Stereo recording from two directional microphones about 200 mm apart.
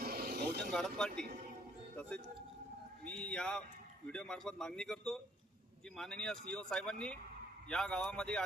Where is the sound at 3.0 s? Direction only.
5° left (ahead or behind).